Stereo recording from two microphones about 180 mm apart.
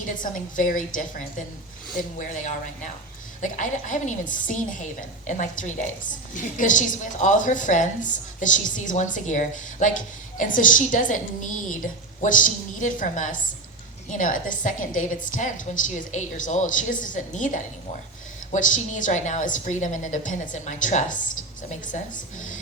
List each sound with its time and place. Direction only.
0.2 s a woman's voice: 45° left (ahead or behind)